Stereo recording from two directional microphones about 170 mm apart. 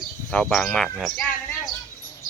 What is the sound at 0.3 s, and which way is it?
Speech, 5° left (ahead or behind).